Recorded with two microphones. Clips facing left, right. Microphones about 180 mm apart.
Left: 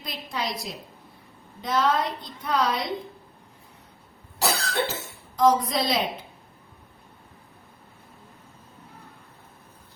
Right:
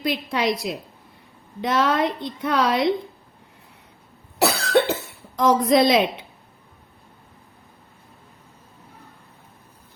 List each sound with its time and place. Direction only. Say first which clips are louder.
0.0 s a woman's voice: right 9 dB; 75° right (ahead or behind)
4.4 s cough: right 7 dB; 65° right (ahead or behind)
5.4 s a woman's voice: right 4 dB; 75° right (ahead or behind)